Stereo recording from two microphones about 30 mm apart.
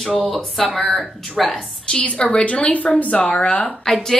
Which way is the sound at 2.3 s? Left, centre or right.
Left.